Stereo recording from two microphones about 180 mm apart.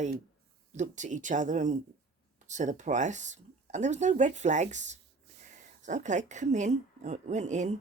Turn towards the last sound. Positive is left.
turn(degrees=-40)  # may be behind; listen again after turning